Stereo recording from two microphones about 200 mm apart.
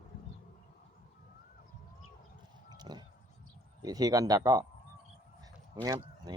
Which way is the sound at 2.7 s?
20° right (ahead or behind).